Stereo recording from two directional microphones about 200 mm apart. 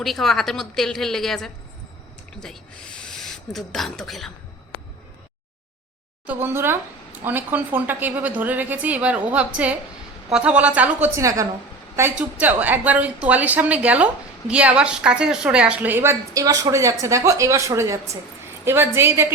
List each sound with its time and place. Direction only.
0.0 s a woman's voice: centre (ahead or behind)
3.0 s owl: centre (ahead or behind)
3.7 s a woman's voice: centre (ahead or behind)
6.2 s a woman's voice: 10° right (ahead or behind)